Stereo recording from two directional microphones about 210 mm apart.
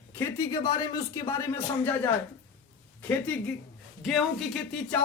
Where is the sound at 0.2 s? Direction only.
15° left (ahead or behind).